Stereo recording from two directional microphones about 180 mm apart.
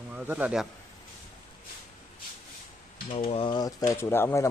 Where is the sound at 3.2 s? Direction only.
30° left (ahead or behind); by 4.5 s 15° left (ahead or behind).